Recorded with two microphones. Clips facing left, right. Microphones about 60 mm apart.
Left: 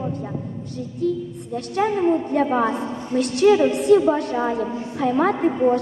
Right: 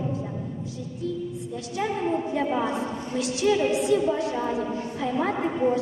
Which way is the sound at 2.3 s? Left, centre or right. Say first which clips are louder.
Left 6 dB; left.